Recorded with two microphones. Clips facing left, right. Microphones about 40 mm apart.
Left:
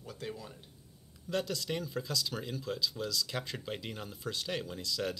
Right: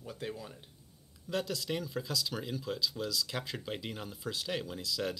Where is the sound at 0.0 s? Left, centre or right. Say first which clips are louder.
Right 1 dB; centre.